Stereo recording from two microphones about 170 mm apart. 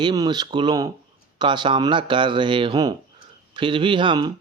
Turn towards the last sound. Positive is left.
turn(degrees=-25)  # may be behind; listen again after turning